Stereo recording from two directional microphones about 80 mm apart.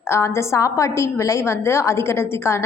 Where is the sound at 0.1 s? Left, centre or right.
Left.